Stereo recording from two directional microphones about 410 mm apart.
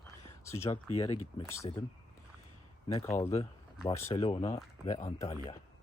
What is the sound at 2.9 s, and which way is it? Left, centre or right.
Speech, centre.